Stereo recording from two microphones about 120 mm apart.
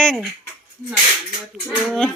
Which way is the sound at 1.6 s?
Centre (ahead or behind).